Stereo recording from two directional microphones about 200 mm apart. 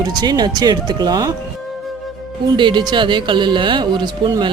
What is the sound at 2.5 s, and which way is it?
Speech, 25° right (ahead or behind).